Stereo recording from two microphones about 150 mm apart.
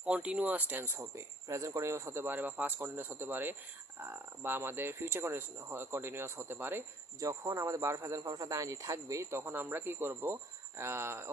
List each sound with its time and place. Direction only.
0.0 s speech: 10° right (ahead or behind)